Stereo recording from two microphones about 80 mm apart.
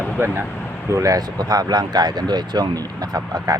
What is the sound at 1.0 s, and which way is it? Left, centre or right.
Speech, right.